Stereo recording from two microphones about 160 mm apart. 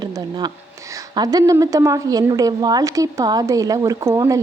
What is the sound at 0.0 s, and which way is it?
A woman's voice, 25° right (ahead or behind).